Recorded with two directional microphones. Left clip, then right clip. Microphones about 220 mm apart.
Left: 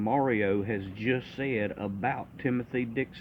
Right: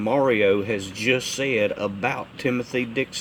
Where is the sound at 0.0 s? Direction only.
15° right (ahead or behind).